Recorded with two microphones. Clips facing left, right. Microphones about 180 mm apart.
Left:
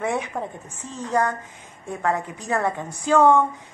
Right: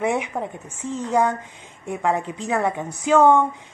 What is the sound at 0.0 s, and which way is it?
A woman's voice, 15° right (ahead or behind).